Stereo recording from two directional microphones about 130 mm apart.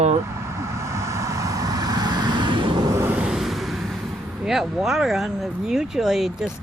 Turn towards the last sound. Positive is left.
turn(degrees=-5)  # may be behind; listen again after turning